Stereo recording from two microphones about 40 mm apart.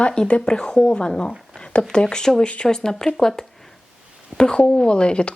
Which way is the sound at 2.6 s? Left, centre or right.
Centre.